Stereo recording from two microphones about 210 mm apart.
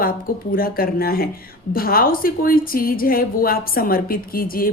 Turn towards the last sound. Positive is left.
turn(degrees=45)  # may be behind; listen again after turning